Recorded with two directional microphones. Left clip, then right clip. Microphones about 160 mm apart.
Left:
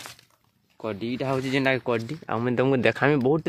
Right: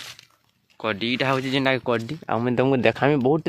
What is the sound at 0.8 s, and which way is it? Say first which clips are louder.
Speech: right 6 dB; centre (ahead or behind).